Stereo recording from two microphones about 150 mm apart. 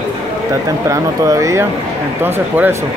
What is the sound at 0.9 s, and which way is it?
Speech, 20° right (ahead or behind).